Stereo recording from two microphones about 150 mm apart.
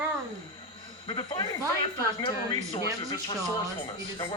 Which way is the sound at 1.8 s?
30° left (ahead or behind).